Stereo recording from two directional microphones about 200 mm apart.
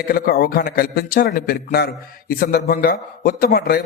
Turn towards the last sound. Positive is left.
turn(degrees=50)  # may be behind; listen again after turning